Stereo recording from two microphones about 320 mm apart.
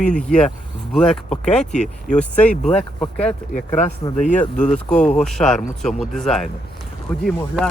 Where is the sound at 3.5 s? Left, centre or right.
Left.